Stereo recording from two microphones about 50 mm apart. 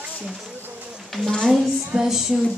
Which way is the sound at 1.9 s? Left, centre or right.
Centre.